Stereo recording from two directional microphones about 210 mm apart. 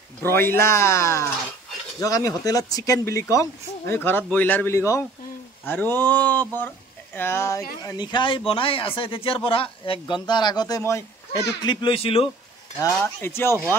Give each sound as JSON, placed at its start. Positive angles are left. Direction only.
{"t": 0.2, "sound": "speech", "side_deg": 10}
{"t": 12.7, "sound": "speech", "side_deg": 10}